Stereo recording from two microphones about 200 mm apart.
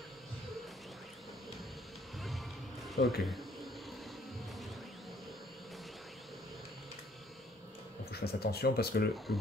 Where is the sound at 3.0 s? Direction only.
50° left (ahead or behind).